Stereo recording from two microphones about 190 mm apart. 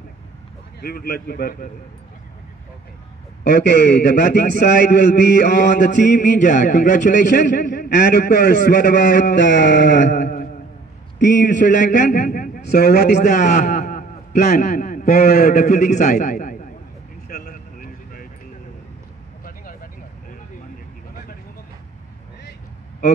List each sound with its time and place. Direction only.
0.7 s a man's voice: 50° left (ahead or behind)
3.4 s a man's voice: 60° left (ahead or behind)
5.8 s a man's voice: 40° left (ahead or behind); by 13.1 s 60° left (ahead or behind)
13.1 s a sound: 40° left (ahead or behind)
15.2 s a man's voice: 50° left (ahead or behind)
17.3 s a sound: 45° left (ahead or behind)
19.4 s vehicle: 50° left (ahead or behind)